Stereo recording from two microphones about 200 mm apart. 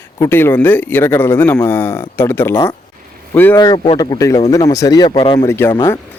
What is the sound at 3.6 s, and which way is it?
A man's voice, 20° left (ahead or behind).